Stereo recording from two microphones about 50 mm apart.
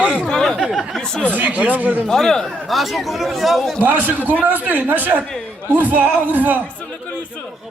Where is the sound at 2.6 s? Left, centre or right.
Centre.